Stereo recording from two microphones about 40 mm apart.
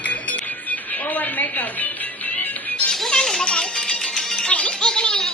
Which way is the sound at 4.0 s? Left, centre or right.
Centre.